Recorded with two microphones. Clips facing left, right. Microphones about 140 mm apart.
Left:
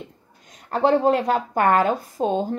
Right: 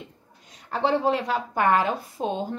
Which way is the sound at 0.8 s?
45° left (ahead or behind).